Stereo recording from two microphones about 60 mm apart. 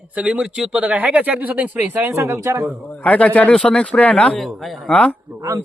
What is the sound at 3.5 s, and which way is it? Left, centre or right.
Speech, centre.